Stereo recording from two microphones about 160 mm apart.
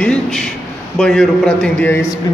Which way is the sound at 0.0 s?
5° left (ahead or behind).